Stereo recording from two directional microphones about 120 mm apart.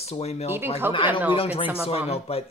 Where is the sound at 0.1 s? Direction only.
60° left (ahead or behind).